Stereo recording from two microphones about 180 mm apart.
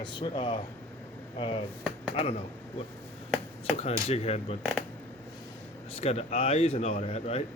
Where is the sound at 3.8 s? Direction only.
35° left (ahead or behind).